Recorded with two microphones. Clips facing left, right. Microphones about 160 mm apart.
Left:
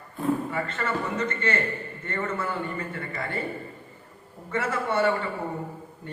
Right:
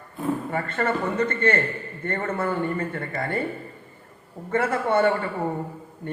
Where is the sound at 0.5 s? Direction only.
55° right (ahead or behind).